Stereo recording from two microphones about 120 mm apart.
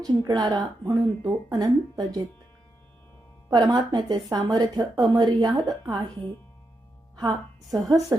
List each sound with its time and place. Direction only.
0.0 s speech: 35° right (ahead or behind)
3.5 s speech: 35° right (ahead or behind)
7.2 s speech: 30° right (ahead or behind)